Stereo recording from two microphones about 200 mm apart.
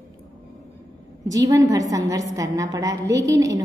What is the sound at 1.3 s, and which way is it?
A woman's voice, 15° right (ahead or behind).